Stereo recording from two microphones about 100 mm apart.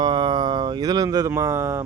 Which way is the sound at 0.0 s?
50° right (ahead or behind).